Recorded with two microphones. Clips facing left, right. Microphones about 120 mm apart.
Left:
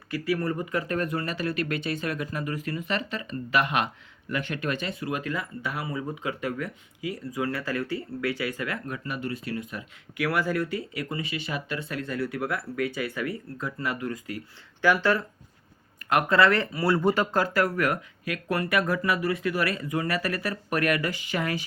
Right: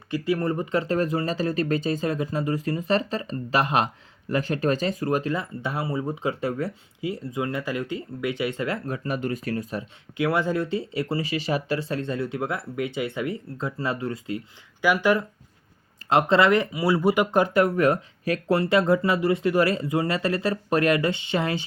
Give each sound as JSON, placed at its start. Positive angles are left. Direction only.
{"t": 0.1, "sound": "speech", "side_deg": -20}
{"t": 10.2, "sound": "speech", "side_deg": -25}
{"t": 14.8, "sound": "speech", "side_deg": -10}
{"t": 16.0, "sound": "speech", "side_deg": -25}